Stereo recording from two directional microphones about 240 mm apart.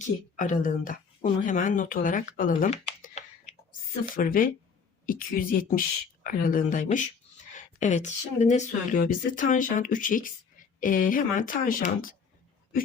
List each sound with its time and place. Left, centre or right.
0.0 s speech: left